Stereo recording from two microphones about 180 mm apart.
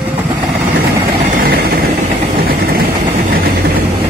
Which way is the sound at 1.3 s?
55° right (ahead or behind).